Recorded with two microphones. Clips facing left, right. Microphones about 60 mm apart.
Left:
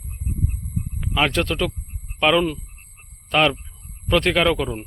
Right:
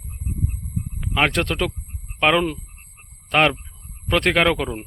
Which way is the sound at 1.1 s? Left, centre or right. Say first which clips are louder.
Even; right.